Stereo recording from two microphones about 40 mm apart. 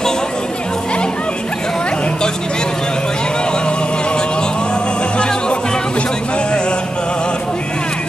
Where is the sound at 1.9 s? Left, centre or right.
Left.